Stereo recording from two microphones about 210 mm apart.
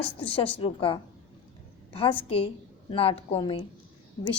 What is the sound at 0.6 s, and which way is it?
A woman's voice, 25° left (ahead or behind).